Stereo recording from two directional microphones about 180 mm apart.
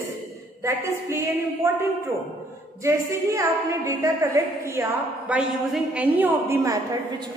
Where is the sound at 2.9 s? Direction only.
20° right (ahead or behind).